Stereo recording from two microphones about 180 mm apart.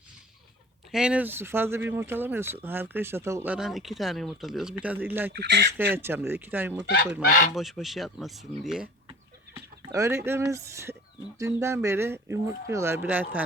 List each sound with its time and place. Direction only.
0.9 s speech: 5° right (ahead or behind)
5.3 s speech: 70° right (ahead or behind)
5.7 s speech: 10° right (ahead or behind)
9.9 s speech: 15° right (ahead or behind)